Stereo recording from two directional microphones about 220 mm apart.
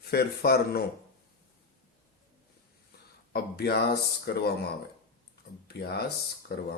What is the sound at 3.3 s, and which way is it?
Speech, 45° left (ahead or behind).